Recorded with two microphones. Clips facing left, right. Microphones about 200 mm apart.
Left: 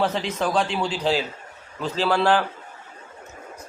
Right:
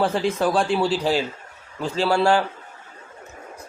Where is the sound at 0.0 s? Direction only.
5° right (ahead or behind).